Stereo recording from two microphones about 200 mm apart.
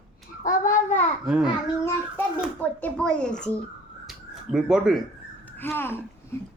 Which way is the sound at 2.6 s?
5° left (ahead or behind).